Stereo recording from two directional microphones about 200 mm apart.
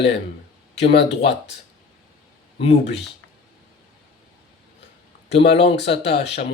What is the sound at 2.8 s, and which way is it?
Speech, 60° left (ahead or behind).